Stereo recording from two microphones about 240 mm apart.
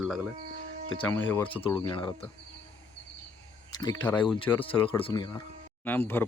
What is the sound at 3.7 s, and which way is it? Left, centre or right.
Speech, centre.